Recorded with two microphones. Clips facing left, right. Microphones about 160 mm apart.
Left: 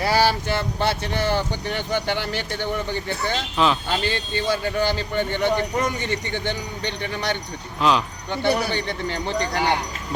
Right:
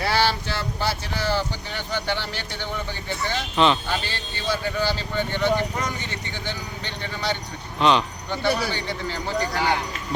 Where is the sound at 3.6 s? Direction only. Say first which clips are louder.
Right 1 dB; centre (ahead or behind).